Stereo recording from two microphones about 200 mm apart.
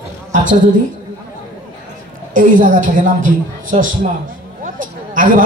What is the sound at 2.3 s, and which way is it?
A woman's voice, 40° right (ahead or behind).